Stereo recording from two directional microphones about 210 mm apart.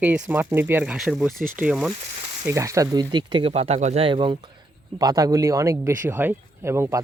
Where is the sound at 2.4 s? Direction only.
15° right (ahead or behind).